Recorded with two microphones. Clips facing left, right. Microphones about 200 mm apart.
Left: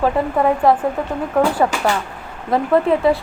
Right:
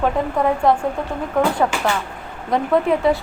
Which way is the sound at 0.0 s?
5° left (ahead or behind).